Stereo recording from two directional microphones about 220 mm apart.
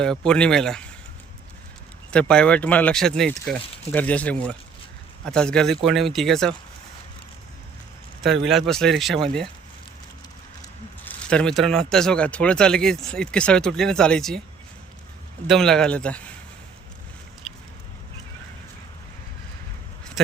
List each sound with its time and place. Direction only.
0.3 s speech: 5° left (ahead or behind)
2.0 s speech: 5° left (ahead or behind)
8.2 s speech: 50° right (ahead or behind)
8.4 s speech: centre (ahead or behind)
11.0 s speech: 5° left (ahead or behind)
15.4 s speech: centre (ahead or behind)
20.2 s speech: centre (ahead or behind)